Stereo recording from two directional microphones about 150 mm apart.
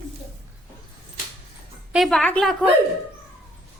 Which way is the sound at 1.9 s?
Centre (ahead or behind).